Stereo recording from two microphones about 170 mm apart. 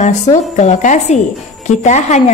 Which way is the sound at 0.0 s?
45° left (ahead or behind).